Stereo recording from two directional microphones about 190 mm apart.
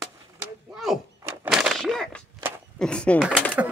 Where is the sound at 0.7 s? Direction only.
Centre (ahead or behind).